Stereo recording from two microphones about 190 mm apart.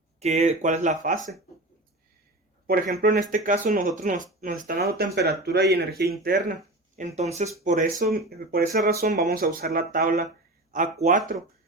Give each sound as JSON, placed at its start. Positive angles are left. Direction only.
{"t": 0.2, "sound": "speech", "side_deg": -35}
{"t": 3.0, "sound": "speech", "side_deg": -45}
{"t": 8.3, "sound": "speech", "side_deg": -55}